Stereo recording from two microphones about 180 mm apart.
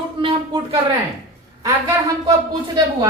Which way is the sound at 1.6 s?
20° right (ahead or behind).